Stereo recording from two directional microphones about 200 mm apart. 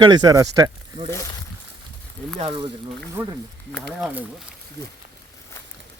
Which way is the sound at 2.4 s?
25° right (ahead or behind).